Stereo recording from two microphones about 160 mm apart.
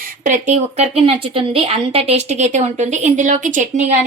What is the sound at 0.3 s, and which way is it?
Speech, 45° right (ahead or behind).